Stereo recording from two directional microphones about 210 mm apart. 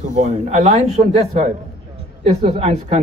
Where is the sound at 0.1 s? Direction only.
35° right (ahead or behind).